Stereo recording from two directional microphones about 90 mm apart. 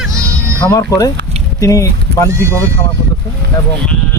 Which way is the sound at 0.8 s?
40° left (ahead or behind).